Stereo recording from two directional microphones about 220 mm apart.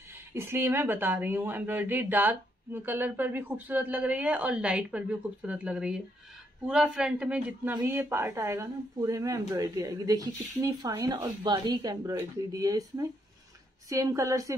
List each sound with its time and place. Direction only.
0.3 s a man's voice: 10° right (ahead or behind)